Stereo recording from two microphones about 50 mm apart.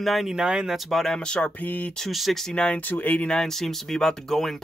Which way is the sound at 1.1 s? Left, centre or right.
Centre.